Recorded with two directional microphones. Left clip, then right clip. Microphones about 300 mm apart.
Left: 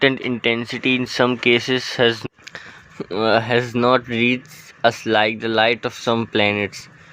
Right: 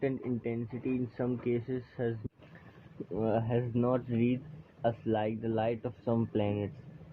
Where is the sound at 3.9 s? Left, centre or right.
Left.